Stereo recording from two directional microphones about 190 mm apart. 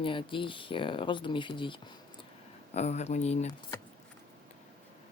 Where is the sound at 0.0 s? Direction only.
25° left (ahead or behind).